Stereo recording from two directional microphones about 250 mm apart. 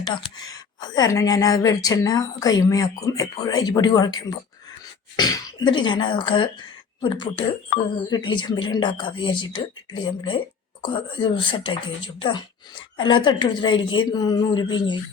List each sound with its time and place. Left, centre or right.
0.0 s a woman's voice: centre